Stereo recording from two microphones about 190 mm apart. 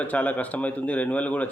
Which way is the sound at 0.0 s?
10° left (ahead or behind).